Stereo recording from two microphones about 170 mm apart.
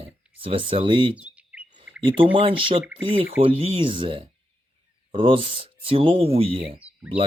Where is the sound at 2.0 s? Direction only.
30° right (ahead or behind).